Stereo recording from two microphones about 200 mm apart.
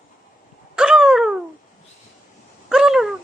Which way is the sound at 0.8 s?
5° right (ahead or behind).